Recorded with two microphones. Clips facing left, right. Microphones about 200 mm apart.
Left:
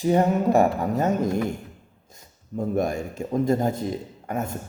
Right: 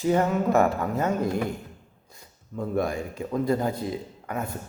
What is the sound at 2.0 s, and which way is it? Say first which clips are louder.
A man's voice: left 5 dB; 45° left (ahead or behind).